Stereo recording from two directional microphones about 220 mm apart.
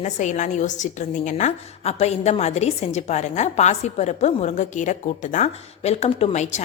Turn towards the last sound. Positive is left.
turn(degrees=30)  # may be behind; listen again after turning